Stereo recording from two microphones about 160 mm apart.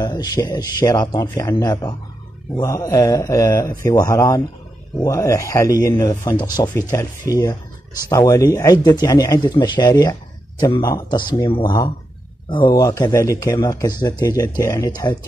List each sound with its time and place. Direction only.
0.0 s speech: 25° left (ahead or behind)